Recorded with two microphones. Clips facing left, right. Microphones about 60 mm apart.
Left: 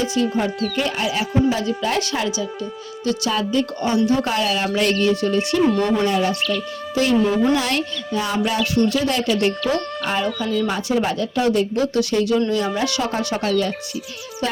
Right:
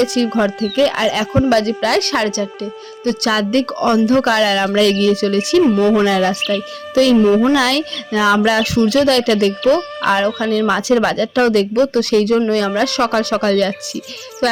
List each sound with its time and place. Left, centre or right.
0.0 s speech: right
0.8 s speech: right
3.2 s speech: right
5.7 s speech: centre
6.0 s speech: right
10.1 s speech: right
12.5 s speech: right
14.4 s music: right